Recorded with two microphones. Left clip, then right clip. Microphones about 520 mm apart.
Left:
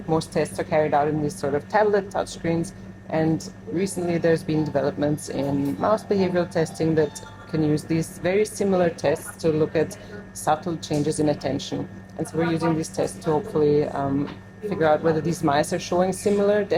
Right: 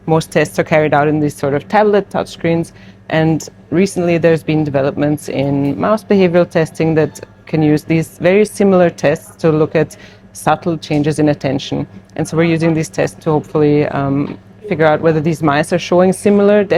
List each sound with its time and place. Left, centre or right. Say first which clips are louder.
0.1 s a woman's voice: right 10 dB; right